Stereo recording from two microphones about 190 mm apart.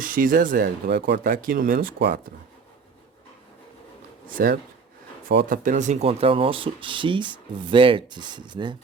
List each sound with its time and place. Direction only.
0.0 s speech: 45° right (ahead or behind)
4.4 s speech: 50° right (ahead or behind); by 8.7 s 25° right (ahead or behind)